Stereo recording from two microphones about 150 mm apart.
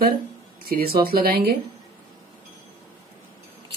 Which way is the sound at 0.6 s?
90° right.